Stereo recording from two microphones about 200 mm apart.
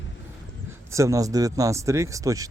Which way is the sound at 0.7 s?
15° right (ahead or behind).